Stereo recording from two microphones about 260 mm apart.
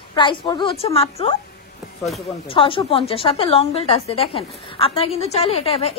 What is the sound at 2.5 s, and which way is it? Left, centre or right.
A woman's voice, centre.